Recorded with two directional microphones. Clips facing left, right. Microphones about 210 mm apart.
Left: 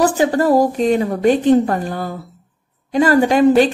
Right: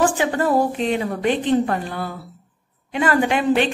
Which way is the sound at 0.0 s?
40° left (ahead or behind).